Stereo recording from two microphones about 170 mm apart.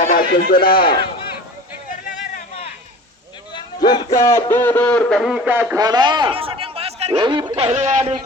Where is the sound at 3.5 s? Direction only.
25° left (ahead or behind); by 5.7 s 10° right (ahead or behind).